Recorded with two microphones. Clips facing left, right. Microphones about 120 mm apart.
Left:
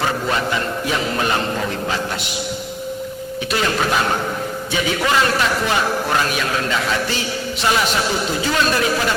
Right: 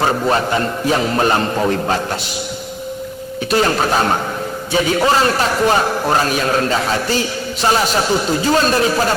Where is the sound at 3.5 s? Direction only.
40° right (ahead or behind).